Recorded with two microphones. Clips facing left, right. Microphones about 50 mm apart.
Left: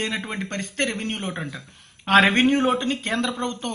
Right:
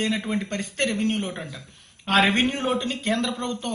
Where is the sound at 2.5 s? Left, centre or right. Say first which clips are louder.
Left 5 dB; left.